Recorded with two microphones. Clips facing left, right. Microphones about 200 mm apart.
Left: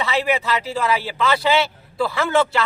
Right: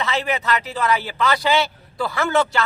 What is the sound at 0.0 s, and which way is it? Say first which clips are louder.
A man's voice: left 2 dB; 5° left (ahead or behind).